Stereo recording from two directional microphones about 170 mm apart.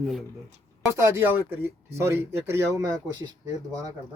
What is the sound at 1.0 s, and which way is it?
Speech, 15° right (ahead or behind).